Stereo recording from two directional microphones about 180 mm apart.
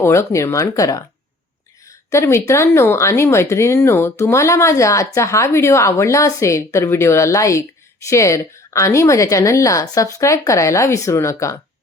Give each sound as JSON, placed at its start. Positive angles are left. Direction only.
{"t": 0.0, "sound": "speech", "side_deg": 15}
{"t": 2.0, "sound": "speech", "side_deg": 15}